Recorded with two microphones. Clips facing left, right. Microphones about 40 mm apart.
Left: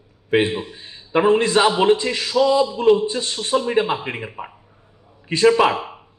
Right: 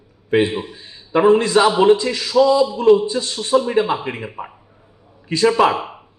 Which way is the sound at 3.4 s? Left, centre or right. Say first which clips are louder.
Right 1 dB; centre.